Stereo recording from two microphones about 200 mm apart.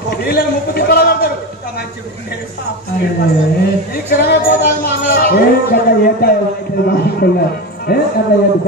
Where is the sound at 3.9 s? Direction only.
55° left (ahead or behind).